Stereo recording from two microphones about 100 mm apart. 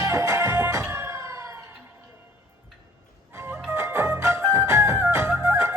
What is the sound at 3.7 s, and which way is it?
Music, 25° right (ahead or behind).